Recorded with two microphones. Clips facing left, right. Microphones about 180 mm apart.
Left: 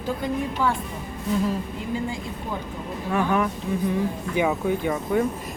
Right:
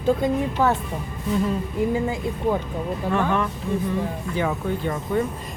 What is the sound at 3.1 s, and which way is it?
Speech, 10° left (ahead or behind).